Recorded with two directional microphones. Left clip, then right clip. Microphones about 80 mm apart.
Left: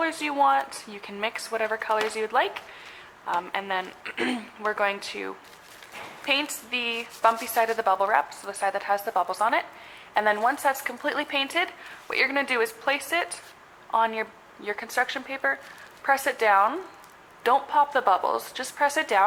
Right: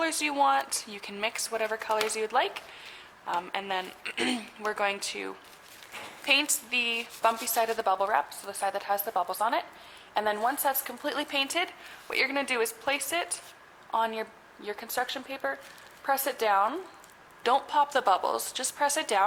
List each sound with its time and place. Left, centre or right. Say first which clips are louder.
0.0 s a woman's voice: left 3 dB; right